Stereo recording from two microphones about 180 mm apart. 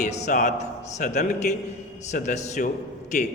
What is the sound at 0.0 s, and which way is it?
A man's voice, 40° left (ahead or behind).